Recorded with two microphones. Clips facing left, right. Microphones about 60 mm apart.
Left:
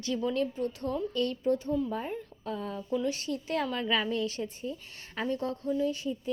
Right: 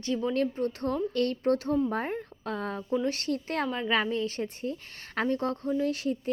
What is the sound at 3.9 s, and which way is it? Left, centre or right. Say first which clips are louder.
Speech: right 3 dB; right.